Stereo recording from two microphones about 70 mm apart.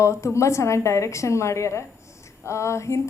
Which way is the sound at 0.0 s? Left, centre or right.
Left.